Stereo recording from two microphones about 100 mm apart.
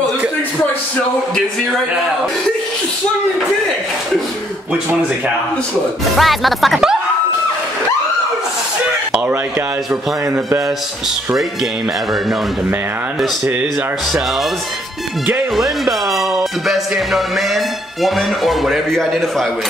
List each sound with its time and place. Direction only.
6.1 s speech: centre (ahead or behind)
15.5 s speech: centre (ahead or behind)